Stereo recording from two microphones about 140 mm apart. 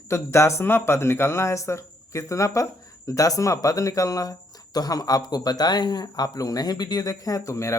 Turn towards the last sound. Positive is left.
turn(degrees=20)  # may be behind; listen again after turning